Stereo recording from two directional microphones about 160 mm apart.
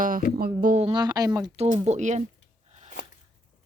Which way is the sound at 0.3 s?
65° right (ahead or behind).